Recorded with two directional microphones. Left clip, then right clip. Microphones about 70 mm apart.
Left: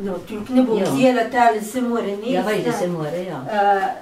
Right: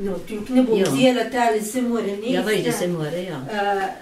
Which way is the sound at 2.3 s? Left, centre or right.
Right.